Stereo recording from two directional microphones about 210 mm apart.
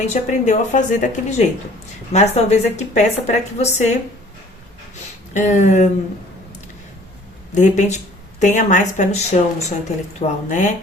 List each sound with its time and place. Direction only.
0.0 s speech: 35° left (ahead or behind)
5.3 s speech: 35° left (ahead or behind)
7.5 s speech: 35° left (ahead or behind)